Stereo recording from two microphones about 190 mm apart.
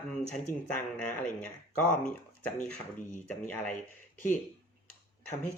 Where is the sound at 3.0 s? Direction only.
40° left (ahead or behind).